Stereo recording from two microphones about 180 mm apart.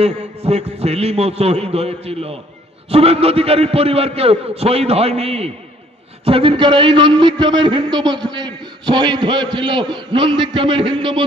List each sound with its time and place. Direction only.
0.0 s a man's voice: 35° right (ahead or behind)